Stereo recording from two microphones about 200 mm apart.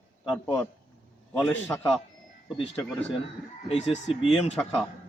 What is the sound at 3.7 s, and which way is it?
Speech, 30° left (ahead or behind).